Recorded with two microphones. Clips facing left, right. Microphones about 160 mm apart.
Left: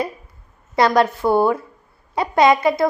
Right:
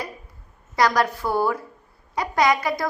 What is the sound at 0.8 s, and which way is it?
A woman's voice, 25° left (ahead or behind).